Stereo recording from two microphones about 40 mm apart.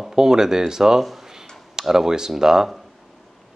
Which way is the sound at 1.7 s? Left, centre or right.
Centre.